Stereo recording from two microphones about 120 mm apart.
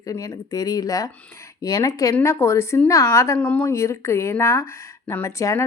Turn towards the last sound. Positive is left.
turn(degrees=25)  # may be behind; listen again after turning